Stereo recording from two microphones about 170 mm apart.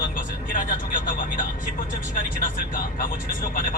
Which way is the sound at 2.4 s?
55° left (ahead or behind).